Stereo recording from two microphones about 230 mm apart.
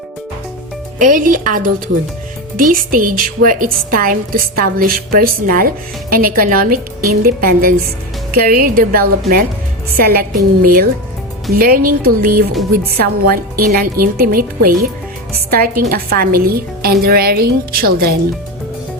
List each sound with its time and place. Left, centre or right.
0.9 s a woman's voice: right